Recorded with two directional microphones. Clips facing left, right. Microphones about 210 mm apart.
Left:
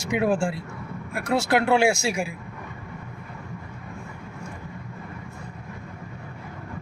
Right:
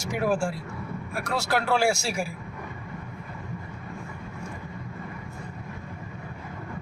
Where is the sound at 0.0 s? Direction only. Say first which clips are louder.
Left 3 dB; 20° left (ahead or behind).